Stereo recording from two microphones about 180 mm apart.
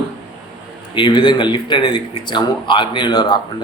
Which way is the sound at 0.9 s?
25° left (ahead or behind).